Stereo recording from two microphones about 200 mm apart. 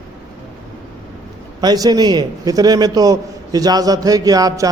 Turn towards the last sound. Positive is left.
turn(degrees=-20)  # may be behind; listen again after turning